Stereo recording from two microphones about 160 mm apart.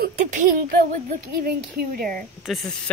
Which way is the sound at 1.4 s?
65° right (ahead or behind).